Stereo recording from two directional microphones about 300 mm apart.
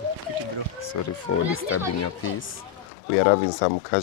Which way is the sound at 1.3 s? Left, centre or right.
Left.